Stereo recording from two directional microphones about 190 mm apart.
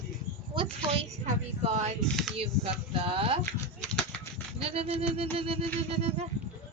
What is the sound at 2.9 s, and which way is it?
Speech, 30° right (ahead or behind).